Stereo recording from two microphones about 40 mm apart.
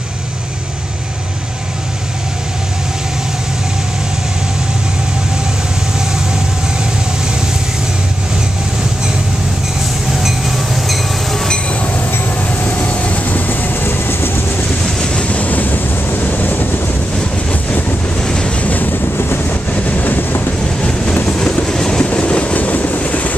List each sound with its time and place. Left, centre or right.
12.8 s vehicle: left
13.2 s train: left
14.8 s train: centre
15.2 s vehicle: left
17.5 s vehicle: left
18.2 s waves: left
18.6 s waves: left
19.1 s vehicle: left
19.7 s train: left
20.8 s train: left
21.6 s train: centre; by 22.6 s left
22.6 s train: left